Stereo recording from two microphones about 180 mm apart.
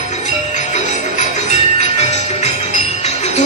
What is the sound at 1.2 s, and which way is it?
Music, 40° left (ahead or behind).